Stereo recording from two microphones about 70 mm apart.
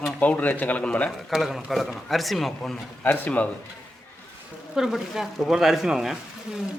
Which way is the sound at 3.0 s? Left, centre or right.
Left.